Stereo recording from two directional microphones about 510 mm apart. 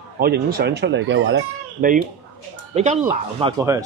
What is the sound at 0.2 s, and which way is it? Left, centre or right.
Speech, centre.